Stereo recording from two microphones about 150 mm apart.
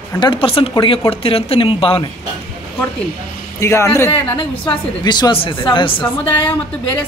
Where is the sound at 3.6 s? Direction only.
15° left (ahead or behind).